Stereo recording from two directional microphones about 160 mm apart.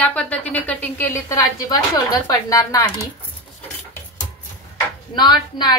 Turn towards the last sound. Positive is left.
turn(degrees=25)  # may be behind; listen again after turning